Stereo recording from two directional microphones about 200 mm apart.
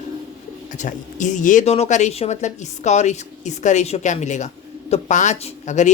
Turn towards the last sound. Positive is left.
turn(degrees=35)  # may be behind; listen again after turning